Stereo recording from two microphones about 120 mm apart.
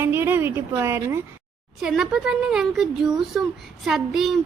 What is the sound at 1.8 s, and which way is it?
A woman's voice, 5° right (ahead or behind).